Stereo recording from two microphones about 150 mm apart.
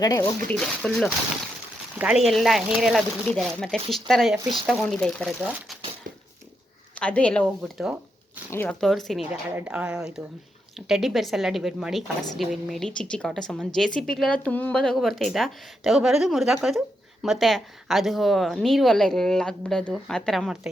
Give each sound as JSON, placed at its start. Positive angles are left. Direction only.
{"t": 0.0, "sound": "speech", "side_deg": 25}
{"t": 0.4, "sound": "a woman's voice", "side_deg": 5}
{"t": 6.9, "sound": "a woman's voice", "side_deg": 10}
{"t": 8.8, "sound": "a woman's voice", "side_deg": 0}